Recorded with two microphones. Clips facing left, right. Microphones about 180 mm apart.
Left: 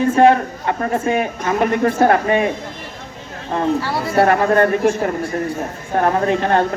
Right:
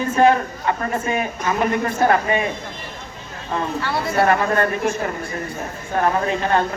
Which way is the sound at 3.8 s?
35° left (ahead or behind).